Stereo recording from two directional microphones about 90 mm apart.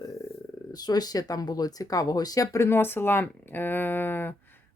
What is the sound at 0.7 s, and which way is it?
Speech, 50° left (ahead or behind).